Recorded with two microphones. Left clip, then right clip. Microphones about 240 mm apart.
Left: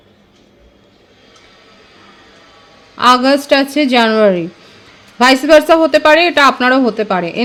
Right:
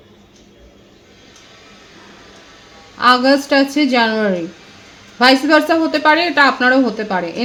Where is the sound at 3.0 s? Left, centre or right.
Left.